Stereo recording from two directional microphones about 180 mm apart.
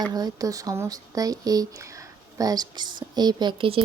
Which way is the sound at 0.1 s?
20° right (ahead or behind).